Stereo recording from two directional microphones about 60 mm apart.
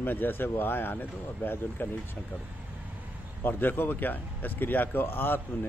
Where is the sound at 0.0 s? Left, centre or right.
Left.